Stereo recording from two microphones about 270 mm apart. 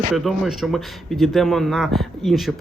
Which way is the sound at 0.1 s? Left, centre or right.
Centre.